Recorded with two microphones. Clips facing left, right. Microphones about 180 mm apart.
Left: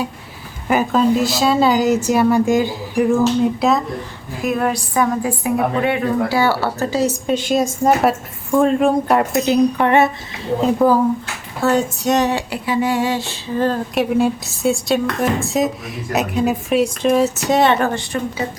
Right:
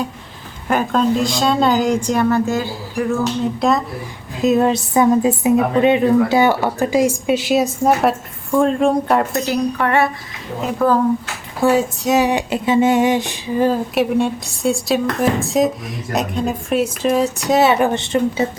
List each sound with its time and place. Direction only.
0.7 s a woman's voice: 5° left (ahead or behind)
3.6 s speech: centre (ahead or behind)
4.4 s a woman's voice: 25° right (ahead or behind); by 9.2 s centre (ahead or behind)
9.3 s speech: 20° left (ahead or behind)
10.8 s a woman's voice: 10° left (ahead or behind)
11.6 s speech: 5° right (ahead or behind); by 18.4 s 25° right (ahead or behind)